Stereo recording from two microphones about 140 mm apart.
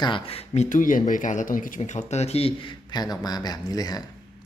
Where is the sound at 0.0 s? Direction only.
40° left (ahead or behind).